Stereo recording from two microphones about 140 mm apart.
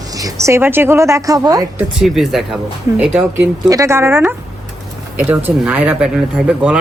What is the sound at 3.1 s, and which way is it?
A man's voice, 20° right (ahead or behind).